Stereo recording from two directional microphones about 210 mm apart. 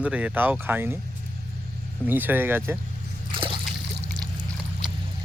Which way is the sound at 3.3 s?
25° right (ahead or behind).